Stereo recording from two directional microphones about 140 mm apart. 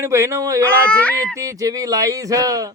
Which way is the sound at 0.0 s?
20° right (ahead or behind).